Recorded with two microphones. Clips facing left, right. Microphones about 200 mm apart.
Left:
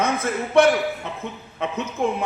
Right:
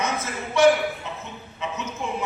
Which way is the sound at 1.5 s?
55° left (ahead or behind).